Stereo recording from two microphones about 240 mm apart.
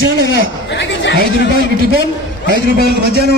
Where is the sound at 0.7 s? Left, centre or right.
Left.